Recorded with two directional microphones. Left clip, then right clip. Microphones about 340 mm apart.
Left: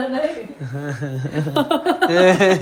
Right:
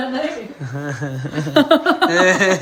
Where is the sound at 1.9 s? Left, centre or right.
Centre.